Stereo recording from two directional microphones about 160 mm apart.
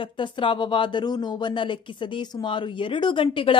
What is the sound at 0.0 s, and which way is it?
Speech, 30° left (ahead or behind).